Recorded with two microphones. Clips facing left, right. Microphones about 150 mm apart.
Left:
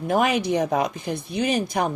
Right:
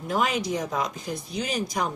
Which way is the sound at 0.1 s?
60° left (ahead or behind).